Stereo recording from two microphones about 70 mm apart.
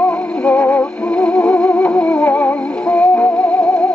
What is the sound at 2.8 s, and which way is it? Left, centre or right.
Music, centre.